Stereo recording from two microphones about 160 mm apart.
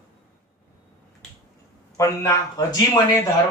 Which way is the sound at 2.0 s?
20° left (ahead or behind).